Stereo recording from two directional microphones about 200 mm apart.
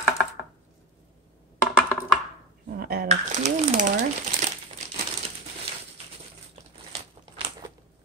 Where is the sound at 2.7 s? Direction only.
50° right (ahead or behind).